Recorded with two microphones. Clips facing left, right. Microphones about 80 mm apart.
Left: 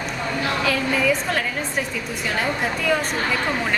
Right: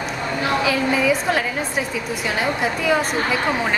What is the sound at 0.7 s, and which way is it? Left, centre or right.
A woman's voice, centre.